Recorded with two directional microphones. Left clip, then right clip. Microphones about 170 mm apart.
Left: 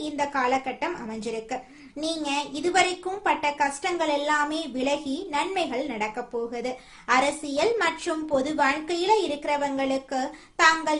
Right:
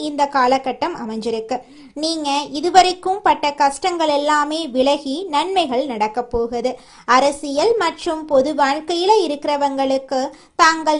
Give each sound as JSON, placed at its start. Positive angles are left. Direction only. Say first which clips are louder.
{"t": 0.0, "sound": "a woman's voice", "louder": "right 9 dB", "side_deg": -40}